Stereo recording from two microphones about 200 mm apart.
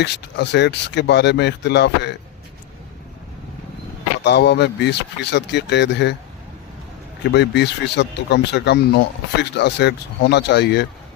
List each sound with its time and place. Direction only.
0.0 s speech: 60° left (ahead or behind)
4.2 s speech: 60° left (ahead or behind)
7.3 s speech: 60° left (ahead or behind)